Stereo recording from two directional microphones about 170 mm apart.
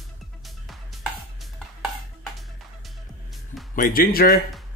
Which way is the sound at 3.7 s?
60° left (ahead or behind).